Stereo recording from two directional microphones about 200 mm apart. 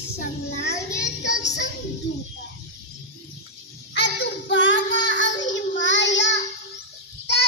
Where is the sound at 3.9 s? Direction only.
60° left (ahead or behind).